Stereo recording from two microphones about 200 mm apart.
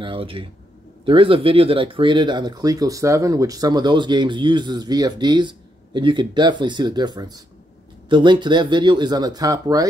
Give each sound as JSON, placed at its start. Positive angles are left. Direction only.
{"t": 0.0, "sound": "speech", "side_deg": -25}